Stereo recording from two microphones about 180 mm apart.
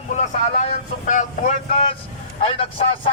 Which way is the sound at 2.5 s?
35° left (ahead or behind).